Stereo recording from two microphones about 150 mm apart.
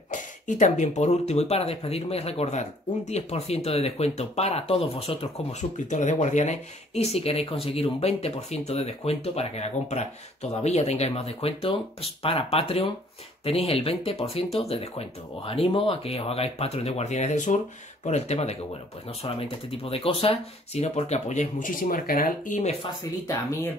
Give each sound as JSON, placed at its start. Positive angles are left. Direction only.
{"t": 0.1, "sound": "speech", "side_deg": 55}
{"t": 23.2, "sound": "speech", "side_deg": 20}